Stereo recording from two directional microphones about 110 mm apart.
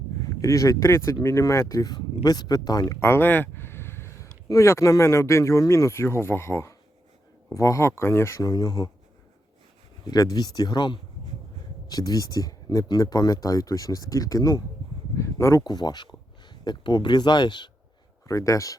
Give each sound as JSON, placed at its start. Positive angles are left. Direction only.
{"t": 0.3, "sound": "speech", "side_deg": 30}
{"t": 3.0, "sound": "a sound", "side_deg": 20}
{"t": 4.4, "sound": "speech", "side_deg": 25}
{"t": 10.1, "sound": "speech", "side_deg": 35}
{"t": 18.3, "sound": "speech", "side_deg": 30}